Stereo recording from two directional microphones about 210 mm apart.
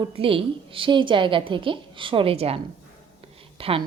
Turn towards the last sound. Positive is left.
turn(degrees=-25)  # may be behind; listen again after turning